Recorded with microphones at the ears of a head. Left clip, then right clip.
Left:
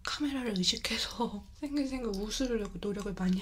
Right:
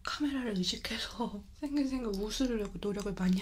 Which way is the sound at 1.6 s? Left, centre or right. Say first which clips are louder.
Even; centre.